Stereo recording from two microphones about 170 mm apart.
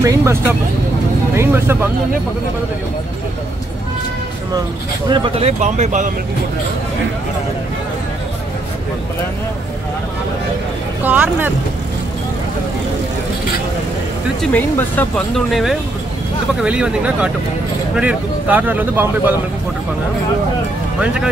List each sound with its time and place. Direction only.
0.0 s speech: 15° right (ahead or behind)
5.0 s speech: 30° right (ahead or behind)
5.6 s speech: 45° right (ahead or behind)
11.0 s speech: 10° right (ahead or behind)
14.4 s speech: 10° left (ahead or behind); by 19.3 s 10° right (ahead or behind)
21.0 s speech: 5° right (ahead or behind)